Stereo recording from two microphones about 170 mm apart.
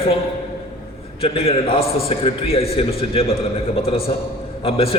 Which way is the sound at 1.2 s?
35° left (ahead or behind).